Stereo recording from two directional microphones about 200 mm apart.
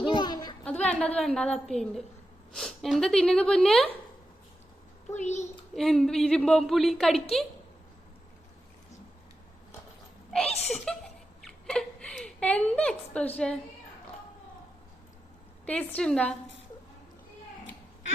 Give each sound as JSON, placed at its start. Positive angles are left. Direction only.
{"t": 0.0, "sound": "a sound", "side_deg": 20}
{"t": 0.6, "sound": "a woman's voice", "side_deg": 5}
{"t": 5.1, "sound": "a child's voice", "side_deg": 35}
{"t": 5.7, "sound": "a woman's voice", "side_deg": 0}
{"t": 10.7, "sound": "speech", "side_deg": 0}
{"t": 15.6, "sound": "a woman's voice", "side_deg": 5}